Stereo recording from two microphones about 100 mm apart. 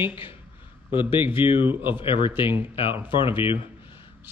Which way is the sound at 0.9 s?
60° left (ahead or behind).